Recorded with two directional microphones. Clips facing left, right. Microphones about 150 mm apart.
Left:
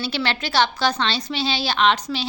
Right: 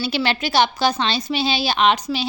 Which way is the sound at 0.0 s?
10° right (ahead or behind).